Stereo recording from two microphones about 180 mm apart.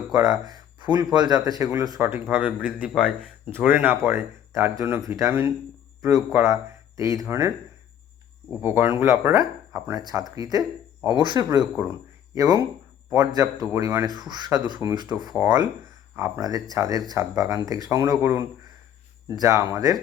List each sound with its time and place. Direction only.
0.1 s speech: 20° right (ahead or behind)
8.6 s speech: 10° right (ahead or behind)